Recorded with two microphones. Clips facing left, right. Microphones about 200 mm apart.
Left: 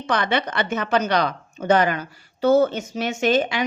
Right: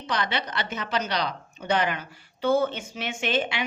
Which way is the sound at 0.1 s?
55° left (ahead or behind).